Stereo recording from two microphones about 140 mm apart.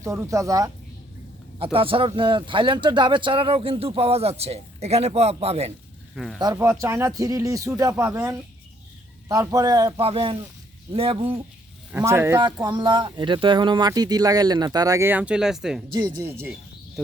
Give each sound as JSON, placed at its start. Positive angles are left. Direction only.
{"t": 0.0, "sound": "speech", "side_deg": -20}
{"t": 1.5, "sound": "speech", "side_deg": -40}
{"t": 6.1, "sound": "speech", "side_deg": 0}
{"t": 6.4, "sound": "speech", "side_deg": -20}
{"t": 10.0, "sound": "speech", "side_deg": -40}
{"t": 12.0, "sound": "speech", "side_deg": -20}
{"t": 12.4, "sound": "speech", "side_deg": -30}
{"t": 15.9, "sound": "speech", "side_deg": -30}